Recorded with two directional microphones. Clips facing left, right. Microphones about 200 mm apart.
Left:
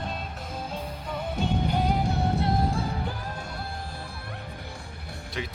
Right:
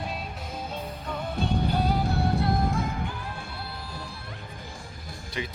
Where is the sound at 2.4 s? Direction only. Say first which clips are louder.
Even; 30° left (ahead or behind).